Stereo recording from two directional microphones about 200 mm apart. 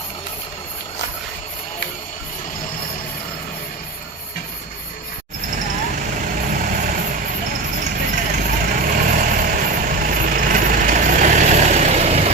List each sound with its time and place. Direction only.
6.5 s vehicle: 40° right (ahead or behind)
8.1 s vehicle: 45° right (ahead or behind)